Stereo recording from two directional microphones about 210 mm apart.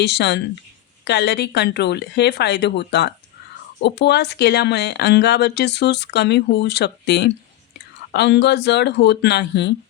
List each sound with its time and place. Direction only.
0.0 s speech: 55° left (ahead or behind)